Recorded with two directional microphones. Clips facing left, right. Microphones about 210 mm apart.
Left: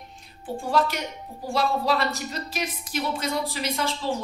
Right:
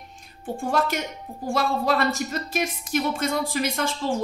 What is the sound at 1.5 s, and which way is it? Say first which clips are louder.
Speech: right 1 dB; 50° right (ahead or behind).